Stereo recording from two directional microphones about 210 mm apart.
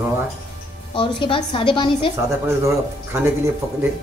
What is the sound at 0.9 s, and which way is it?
Speech, 25° left (ahead or behind).